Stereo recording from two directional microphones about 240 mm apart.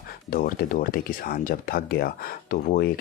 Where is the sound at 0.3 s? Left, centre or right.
Left.